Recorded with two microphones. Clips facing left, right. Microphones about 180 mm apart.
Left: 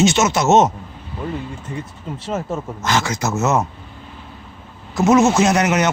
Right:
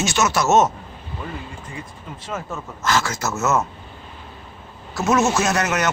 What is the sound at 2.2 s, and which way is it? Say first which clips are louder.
A man's voice: left 6 dB; 25° left (ahead or behind).